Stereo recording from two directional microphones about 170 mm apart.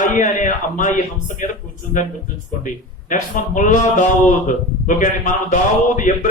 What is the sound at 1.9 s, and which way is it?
Music, 50° left (ahead or behind).